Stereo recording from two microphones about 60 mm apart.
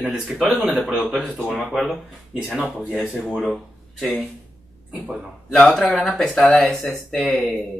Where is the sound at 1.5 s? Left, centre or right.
Centre.